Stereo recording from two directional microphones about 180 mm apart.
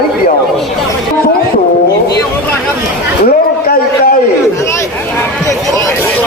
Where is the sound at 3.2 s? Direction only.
60° left (ahead or behind).